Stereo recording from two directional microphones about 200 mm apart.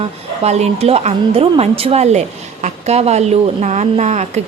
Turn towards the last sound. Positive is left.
turn(degrees=-35)  # may be behind; listen again after turning